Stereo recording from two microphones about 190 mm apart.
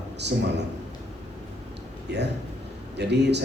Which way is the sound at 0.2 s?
65° right (ahead or behind).